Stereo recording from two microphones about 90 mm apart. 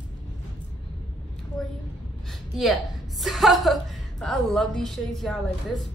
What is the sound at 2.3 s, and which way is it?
A woman's voice, centre (ahead or behind).